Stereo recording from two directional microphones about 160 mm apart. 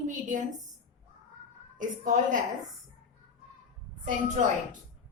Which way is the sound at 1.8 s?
55° right (ahead or behind).